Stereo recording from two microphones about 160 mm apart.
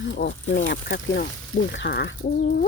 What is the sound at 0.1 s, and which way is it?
Speech, 90° left.